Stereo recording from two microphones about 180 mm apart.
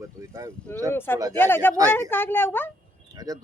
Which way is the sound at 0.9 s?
10° left (ahead or behind).